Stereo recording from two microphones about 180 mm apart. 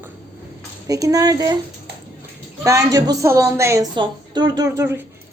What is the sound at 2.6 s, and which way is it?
A woman's voice, 15° right (ahead or behind).